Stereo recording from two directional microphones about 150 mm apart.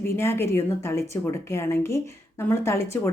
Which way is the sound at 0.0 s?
15° left (ahead or behind).